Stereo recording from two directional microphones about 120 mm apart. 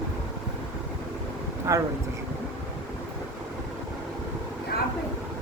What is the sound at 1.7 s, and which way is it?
Speech, 25° right (ahead or behind).